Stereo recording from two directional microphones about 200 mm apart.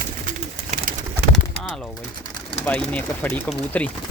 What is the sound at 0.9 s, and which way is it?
Bird, 45° right (ahead or behind).